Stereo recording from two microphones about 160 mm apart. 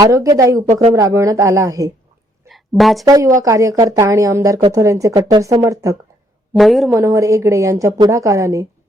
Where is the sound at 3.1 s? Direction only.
20° right (ahead or behind).